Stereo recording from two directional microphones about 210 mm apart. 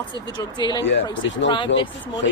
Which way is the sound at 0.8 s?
55° left (ahead or behind).